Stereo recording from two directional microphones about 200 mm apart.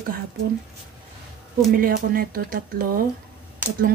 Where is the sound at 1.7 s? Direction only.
45° right (ahead or behind).